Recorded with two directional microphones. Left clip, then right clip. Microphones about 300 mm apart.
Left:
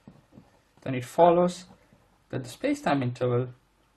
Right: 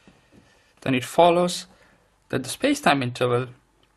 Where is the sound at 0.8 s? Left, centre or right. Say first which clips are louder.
Right 4 dB; right.